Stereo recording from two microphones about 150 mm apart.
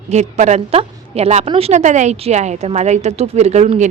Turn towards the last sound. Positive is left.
turn(degrees=-50)  # may be behind; listen again after turning